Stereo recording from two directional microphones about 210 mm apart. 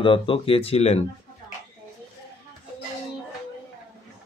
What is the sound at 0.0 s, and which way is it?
Speech, 25° left (ahead or behind).